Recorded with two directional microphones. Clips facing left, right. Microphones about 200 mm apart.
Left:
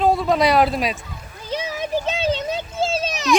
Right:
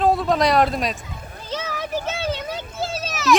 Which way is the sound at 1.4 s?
15° left (ahead or behind).